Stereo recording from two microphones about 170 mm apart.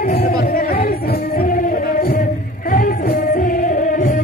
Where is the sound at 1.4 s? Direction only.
60° left (ahead or behind).